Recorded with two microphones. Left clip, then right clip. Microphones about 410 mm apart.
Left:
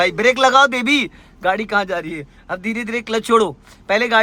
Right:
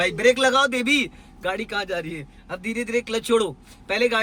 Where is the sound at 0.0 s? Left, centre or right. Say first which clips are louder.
Left 4 dB; centre.